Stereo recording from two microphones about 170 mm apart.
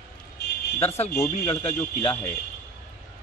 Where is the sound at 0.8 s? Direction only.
40° left (ahead or behind).